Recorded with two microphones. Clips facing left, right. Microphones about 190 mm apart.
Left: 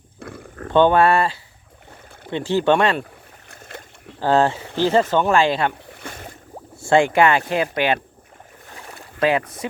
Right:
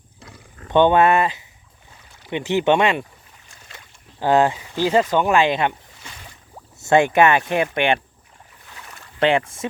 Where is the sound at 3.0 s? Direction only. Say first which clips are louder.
Left 6 dB; 60° left (ahead or behind).